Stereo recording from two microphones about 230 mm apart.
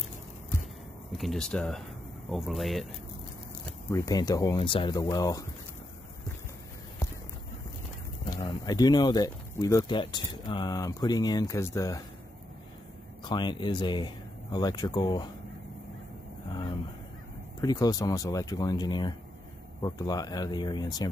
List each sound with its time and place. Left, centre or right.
1.1 s speech: centre
3.6 s speech: centre
8.3 s speech: centre
13.2 s speech: centre
17.6 s speech: centre